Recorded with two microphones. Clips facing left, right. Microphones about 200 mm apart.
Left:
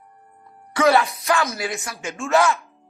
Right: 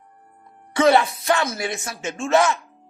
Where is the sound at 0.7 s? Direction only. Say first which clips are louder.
Right 1 dB; 25° right (ahead or behind).